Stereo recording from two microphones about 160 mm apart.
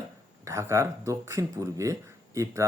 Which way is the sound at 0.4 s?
20° right (ahead or behind).